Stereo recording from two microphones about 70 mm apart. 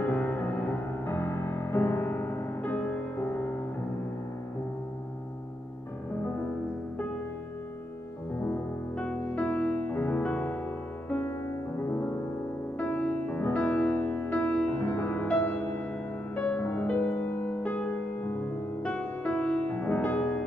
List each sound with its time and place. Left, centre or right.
0.1 s music: left
1.0 s music: left
8.4 s music: left
12.7 s music: centre
18.8 s music: centre